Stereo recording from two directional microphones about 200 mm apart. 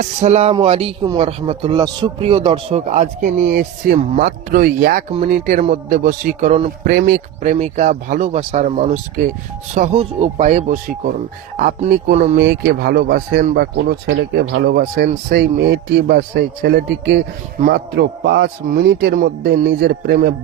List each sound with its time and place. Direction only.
0.0 s speech: 35° right (ahead or behind)
6.9 s speech: 45° right (ahead or behind)
12.4 s speech: 55° right (ahead or behind)
14.1 s speech: 60° right (ahead or behind)